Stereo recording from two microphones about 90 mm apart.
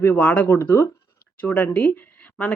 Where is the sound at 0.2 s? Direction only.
15° left (ahead or behind).